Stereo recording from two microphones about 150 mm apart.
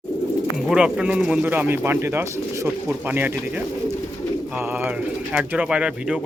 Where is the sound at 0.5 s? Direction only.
5° right (ahead or behind).